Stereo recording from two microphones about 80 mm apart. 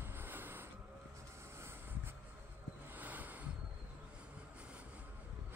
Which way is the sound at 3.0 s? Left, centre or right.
Right.